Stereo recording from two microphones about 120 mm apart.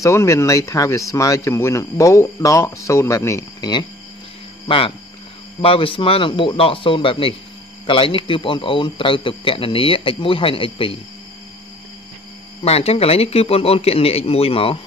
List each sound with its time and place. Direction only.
0.0 s speech: 25° left (ahead or behind)
4.6 s a man's voice: 45° left (ahead or behind)
12.6 s a man's voice: 55° left (ahead or behind)